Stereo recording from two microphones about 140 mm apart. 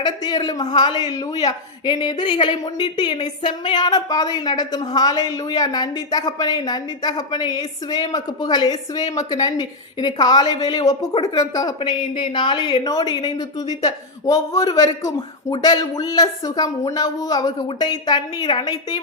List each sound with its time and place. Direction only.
0.0 s a woman's voice: 30° left (ahead or behind)
11.8 s a woman's voice: 40° left (ahead or behind)